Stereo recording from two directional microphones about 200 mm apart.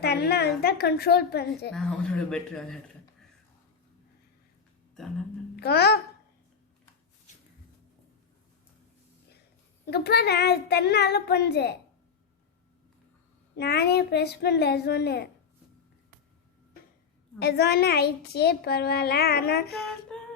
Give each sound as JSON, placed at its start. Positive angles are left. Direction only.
{"t": 0.0, "sound": "a child's voice", "side_deg": 55}
{"t": 1.7, "sound": "speech", "side_deg": 5}
{"t": 5.5, "sound": "a child's voice", "side_deg": 55}
{"t": 9.8, "sound": "a child's voice", "side_deg": 55}
{"t": 13.6, "sound": "a child's voice", "side_deg": 55}
{"t": 17.4, "sound": "a child's voice", "side_deg": 55}
{"t": 19.8, "sound": "female singing", "side_deg": 5}